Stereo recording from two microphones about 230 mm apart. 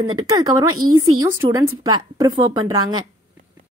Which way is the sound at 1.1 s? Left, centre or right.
Centre.